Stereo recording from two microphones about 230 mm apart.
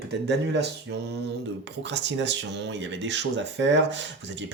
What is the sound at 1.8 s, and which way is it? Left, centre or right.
Speech, right.